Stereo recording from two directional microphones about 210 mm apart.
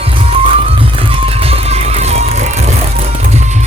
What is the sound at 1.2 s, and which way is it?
Music, 30° right (ahead or behind).